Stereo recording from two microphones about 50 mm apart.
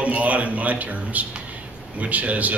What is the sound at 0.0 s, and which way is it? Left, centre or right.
A man's voice, right.